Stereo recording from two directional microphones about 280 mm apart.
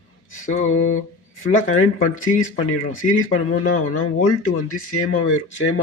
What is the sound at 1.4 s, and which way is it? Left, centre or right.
Speech, left.